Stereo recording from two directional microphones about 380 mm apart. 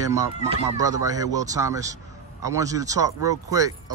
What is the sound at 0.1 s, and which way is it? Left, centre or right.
Speech, centre.